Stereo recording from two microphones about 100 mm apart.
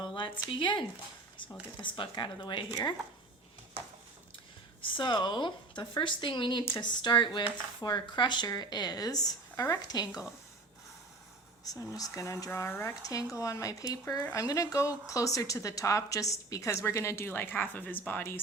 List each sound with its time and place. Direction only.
0.0 s a sound: 55° left (ahead or behind)
0.6 s speech: 50° left (ahead or behind)
4.8 s speech: 55° left (ahead or behind)
11.6 s speech: 35° left (ahead or behind); by 18.3 s 20° left (ahead or behind)